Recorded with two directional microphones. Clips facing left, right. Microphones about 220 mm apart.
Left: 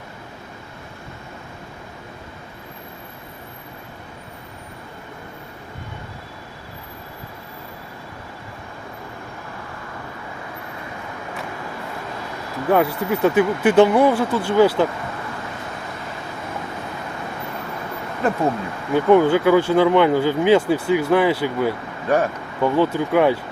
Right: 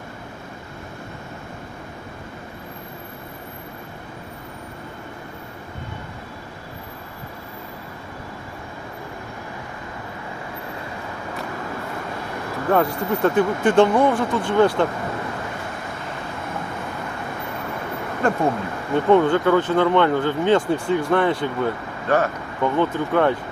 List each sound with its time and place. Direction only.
12.7 s speech: 5° left (ahead or behind)
18.2 s a sound: 5° left (ahead or behind)
18.9 s speech: 5° left (ahead or behind)